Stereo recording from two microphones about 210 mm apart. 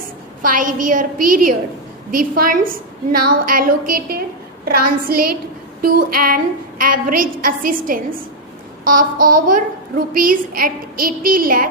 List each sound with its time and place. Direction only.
0.4 s a woman's voice: 40° right (ahead or behind)